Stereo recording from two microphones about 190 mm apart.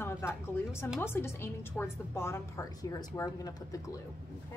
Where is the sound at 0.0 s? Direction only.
15° left (ahead or behind).